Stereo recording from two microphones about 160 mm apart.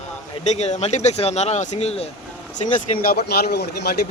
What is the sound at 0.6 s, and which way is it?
Speech, 45° left (ahead or behind).